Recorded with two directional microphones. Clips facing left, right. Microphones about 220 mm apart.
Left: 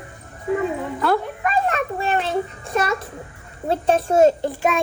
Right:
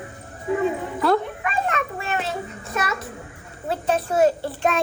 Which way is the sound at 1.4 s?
40° left (ahead or behind).